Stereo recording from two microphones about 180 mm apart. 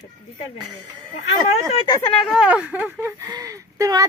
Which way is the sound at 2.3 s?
5° right (ahead or behind).